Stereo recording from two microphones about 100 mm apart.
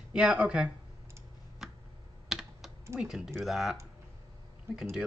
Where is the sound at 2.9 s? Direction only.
5° right (ahead or behind).